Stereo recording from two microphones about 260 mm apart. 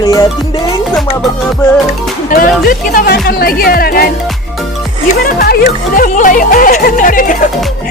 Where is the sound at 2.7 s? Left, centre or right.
Left.